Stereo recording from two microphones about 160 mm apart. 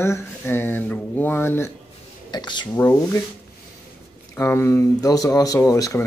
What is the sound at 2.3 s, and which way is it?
Speech, 30° left (ahead or behind).